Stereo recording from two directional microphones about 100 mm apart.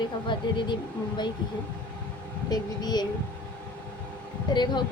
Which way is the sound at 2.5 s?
45° left (ahead or behind).